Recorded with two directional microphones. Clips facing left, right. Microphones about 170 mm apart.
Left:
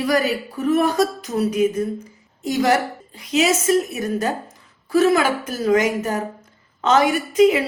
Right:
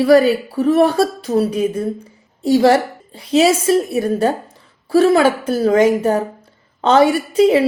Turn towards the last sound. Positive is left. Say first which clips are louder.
# right 2 dB
turn(degrees=-30)  # may be behind; listen again after turning